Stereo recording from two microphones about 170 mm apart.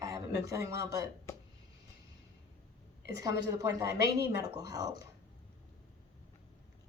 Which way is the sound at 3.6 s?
20° right (ahead or behind).